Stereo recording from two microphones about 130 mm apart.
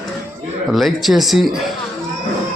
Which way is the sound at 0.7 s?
Centre (ahead or behind).